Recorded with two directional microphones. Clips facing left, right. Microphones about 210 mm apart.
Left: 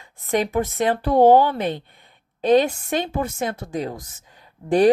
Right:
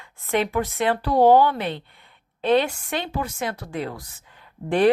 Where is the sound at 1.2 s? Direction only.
20° left (ahead or behind).